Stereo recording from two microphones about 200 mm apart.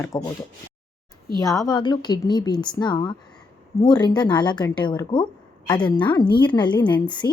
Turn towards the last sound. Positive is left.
turn(degrees=20)  # may be behind; listen again after turning